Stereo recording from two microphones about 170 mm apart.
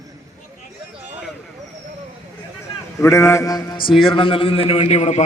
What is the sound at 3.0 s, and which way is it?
Mantra, 15° left (ahead or behind).